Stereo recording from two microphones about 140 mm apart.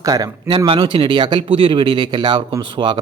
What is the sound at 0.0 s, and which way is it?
Speech, 25° right (ahead or behind).